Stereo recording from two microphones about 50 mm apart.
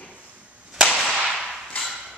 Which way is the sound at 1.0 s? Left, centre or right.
Centre.